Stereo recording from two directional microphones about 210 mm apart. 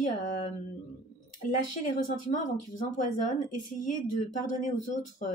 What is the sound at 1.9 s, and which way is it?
Speech, 35° left (ahead or behind).